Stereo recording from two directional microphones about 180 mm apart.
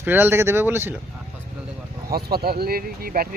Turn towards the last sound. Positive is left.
turn(degrees=-55)  # may be behind; listen again after turning